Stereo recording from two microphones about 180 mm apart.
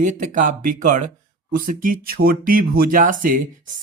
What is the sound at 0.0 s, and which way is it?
Speech, 45° right (ahead or behind).